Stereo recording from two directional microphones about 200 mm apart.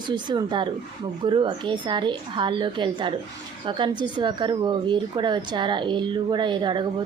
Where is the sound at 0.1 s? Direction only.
20° right (ahead or behind).